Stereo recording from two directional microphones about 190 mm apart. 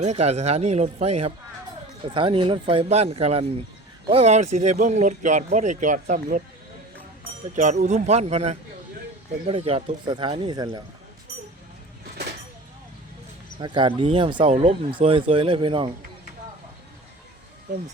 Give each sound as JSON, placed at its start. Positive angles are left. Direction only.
{"t": 0.0, "sound": "speech", "side_deg": -35}
{"t": 7.5, "sound": "speech", "side_deg": -40}
{"t": 13.6, "sound": "speech", "side_deg": -25}